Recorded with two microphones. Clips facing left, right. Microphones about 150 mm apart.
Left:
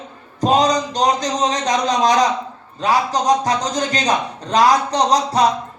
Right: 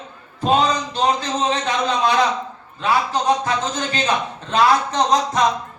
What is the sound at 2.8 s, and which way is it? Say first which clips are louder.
A man's voice: left 2 dB; 40° left (ahead or behind).